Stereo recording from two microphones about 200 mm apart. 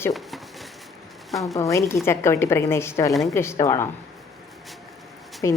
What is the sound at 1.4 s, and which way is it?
A woman's voice, 15° left (ahead or behind).